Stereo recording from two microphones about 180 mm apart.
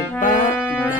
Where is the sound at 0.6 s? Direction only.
10° left (ahead or behind).